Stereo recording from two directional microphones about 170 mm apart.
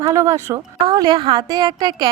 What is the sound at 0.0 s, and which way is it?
A woman's voice, 20° right (ahead or behind).